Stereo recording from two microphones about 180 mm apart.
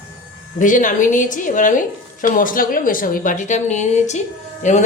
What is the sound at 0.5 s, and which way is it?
A woman's voice, 45° left (ahead or behind).